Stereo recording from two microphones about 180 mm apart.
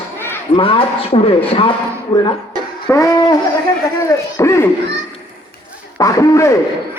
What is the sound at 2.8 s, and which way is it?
Speech, 15° left (ahead or behind).